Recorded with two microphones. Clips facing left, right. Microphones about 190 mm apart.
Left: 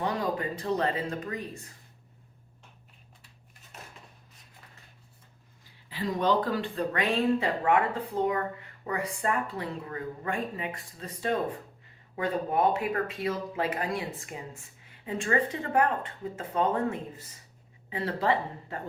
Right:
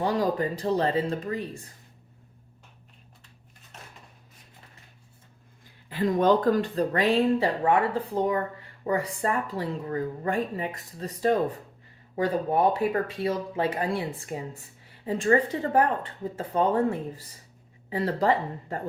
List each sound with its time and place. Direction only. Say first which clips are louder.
0.0 s speech: right 5 dB; 35° right (ahead or behind)
5.9 s speech: right 5 dB; 50° right (ahead or behind); by 7.9 s 30° right (ahead or behind)
9.1 s speech: right 2 dB; 35° right (ahead or behind)